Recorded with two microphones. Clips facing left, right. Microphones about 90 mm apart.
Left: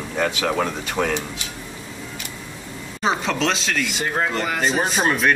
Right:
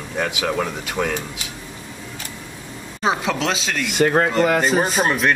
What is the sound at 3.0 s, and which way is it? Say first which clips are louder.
Speech: right 1 dB; 5° right (ahead or behind).